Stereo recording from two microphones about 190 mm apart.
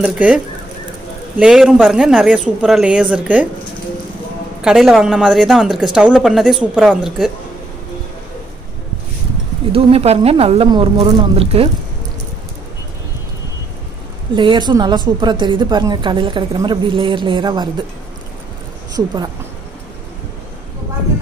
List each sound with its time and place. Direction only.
0.0 s speech: 5° right (ahead or behind)
1.4 s speech: centre (ahead or behind)
4.6 s speech: centre (ahead or behind)
9.7 s a woman's voice: 30° right (ahead or behind)
14.3 s a woman's voice: 25° right (ahead or behind)